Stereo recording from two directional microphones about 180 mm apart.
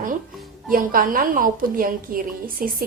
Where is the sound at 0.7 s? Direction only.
50° right (ahead or behind).